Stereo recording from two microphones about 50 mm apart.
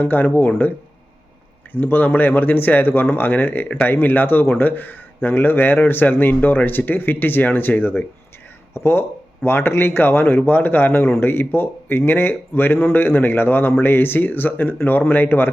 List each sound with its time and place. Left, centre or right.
0.0 s speech: left
1.7 s speech: left
8.7 s speech: left